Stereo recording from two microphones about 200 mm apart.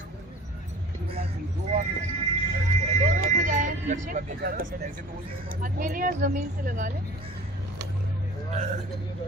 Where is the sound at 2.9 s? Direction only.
40° right (ahead or behind).